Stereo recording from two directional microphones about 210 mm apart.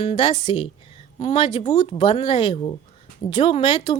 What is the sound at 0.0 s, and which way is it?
A woman's voice, 25° left (ahead or behind).